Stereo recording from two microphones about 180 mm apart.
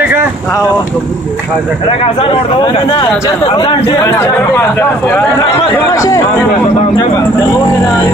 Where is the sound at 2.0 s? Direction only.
30° left (ahead or behind).